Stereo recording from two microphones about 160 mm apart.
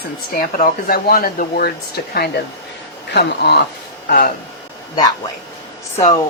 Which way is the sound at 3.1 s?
90° left.